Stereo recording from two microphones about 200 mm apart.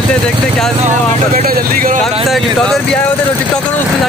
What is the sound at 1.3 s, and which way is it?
Speech, 45° right (ahead or behind).